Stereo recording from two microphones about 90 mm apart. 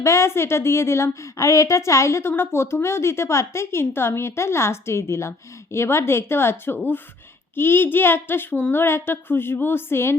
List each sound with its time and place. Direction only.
0.0 s a woman's voice: 30° left (ahead or behind)